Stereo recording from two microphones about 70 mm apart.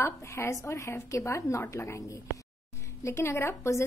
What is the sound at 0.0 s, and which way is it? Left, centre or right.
Speech, left.